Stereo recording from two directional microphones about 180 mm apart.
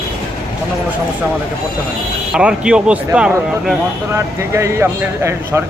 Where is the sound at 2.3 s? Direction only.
5° right (ahead or behind).